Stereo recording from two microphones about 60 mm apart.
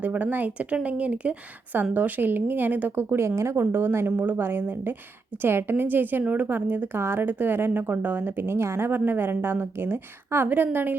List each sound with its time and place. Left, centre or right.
0.0 s speech: right
3.2 s speech: right
3.6 s a woman's voice: right
8.9 s a woman's voice: right